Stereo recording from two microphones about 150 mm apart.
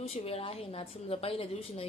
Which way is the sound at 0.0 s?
40° left (ahead or behind).